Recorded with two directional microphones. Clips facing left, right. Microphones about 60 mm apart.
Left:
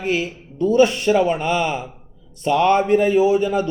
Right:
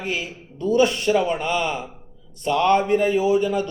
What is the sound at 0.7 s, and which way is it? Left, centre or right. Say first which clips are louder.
A man's voice: left 3 dB; left.